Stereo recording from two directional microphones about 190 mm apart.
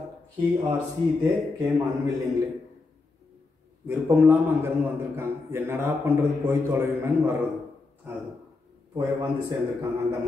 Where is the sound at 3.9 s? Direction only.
15° right (ahead or behind).